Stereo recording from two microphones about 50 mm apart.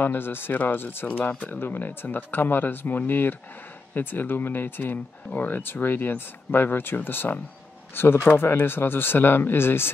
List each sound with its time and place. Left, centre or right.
0.0 s speech: left
1.0 s speech: left
1.6 s speech: left